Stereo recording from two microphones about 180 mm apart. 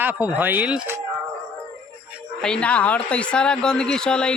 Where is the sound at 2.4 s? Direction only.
5° left (ahead or behind).